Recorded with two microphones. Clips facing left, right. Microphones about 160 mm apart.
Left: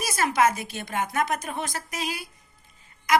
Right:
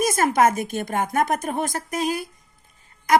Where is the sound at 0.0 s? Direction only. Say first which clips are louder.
Right 4 dB; 50° right (ahead or behind).